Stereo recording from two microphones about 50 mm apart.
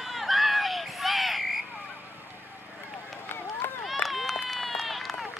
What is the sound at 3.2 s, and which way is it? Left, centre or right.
Run, left.